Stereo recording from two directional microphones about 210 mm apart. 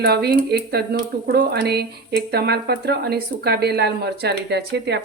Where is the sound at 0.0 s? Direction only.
50° right (ahead or behind).